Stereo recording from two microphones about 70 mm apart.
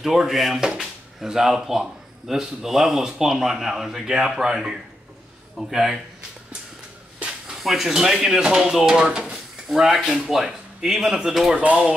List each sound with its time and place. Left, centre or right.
0.0 s speech: centre
7.2 s speech: centre
11.6 s speech: centre